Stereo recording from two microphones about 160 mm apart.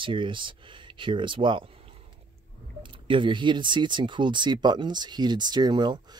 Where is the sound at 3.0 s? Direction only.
30° right (ahead or behind).